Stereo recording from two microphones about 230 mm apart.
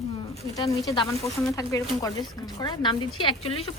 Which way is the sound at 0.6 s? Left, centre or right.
Centre.